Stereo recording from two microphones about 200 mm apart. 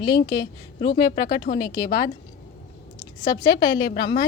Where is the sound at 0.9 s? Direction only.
50° left (ahead or behind).